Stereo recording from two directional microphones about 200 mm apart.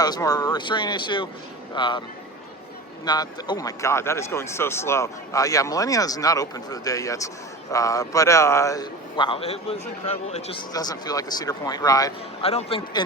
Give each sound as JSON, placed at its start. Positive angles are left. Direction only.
{"t": 0.0, "sound": "speech", "side_deg": 20}
{"t": 3.1, "sound": "speech", "side_deg": 20}
{"t": 12.4, "sound": "speech", "side_deg": 30}